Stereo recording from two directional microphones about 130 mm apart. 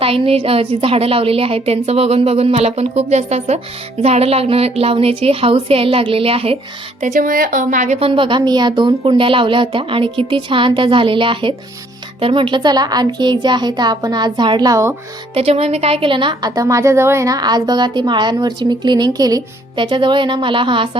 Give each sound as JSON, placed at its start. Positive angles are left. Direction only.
{"t": 0.0, "sound": "a woman's voice", "side_deg": -45}
{"t": 7.0, "sound": "a woman's voice", "side_deg": -90}
{"t": 7.9, "sound": "a woman's voice", "side_deg": -45}
{"t": 15.4, "sound": "a woman's voice", "side_deg": -50}